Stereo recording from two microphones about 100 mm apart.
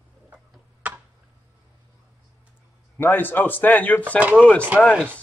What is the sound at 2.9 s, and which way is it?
Speech, 20° left (ahead or behind).